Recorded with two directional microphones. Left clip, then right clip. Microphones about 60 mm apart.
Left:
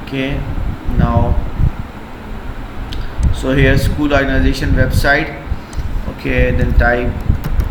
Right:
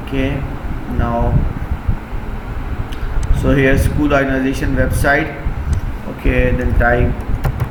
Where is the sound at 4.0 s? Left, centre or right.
Left.